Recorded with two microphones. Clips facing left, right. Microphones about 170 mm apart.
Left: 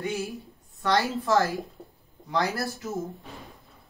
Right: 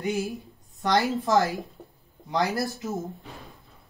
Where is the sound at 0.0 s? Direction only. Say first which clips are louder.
Right 3 dB; 15° right (ahead or behind).